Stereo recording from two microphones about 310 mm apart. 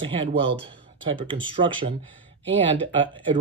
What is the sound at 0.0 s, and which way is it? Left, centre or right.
Speech, centre.